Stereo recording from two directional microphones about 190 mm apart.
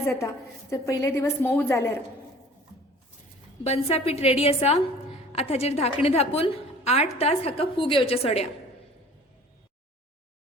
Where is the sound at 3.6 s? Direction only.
35° left (ahead or behind).